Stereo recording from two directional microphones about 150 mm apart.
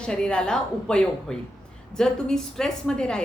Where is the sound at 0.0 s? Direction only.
5° left (ahead or behind).